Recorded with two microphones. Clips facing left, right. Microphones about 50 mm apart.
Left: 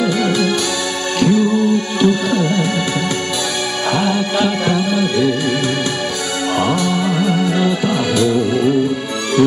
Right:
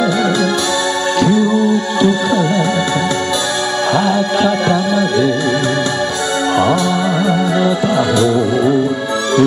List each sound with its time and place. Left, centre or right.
2.0 s music: left
3.9 s music: left
6.6 s music: left